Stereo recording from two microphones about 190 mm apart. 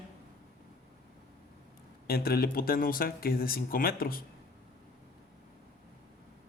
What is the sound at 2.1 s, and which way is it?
Speech, 55° left (ahead or behind).